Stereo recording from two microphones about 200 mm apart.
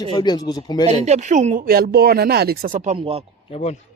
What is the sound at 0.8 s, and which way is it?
Speech, 35° right (ahead or behind).